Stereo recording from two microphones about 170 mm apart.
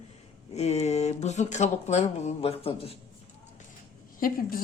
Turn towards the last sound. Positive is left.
turn(degrees=60)  # may be behind; listen again after turning